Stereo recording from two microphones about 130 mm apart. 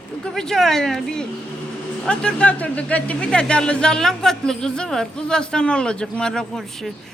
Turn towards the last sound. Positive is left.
turn(degrees=5)  # may be behind; listen again after turning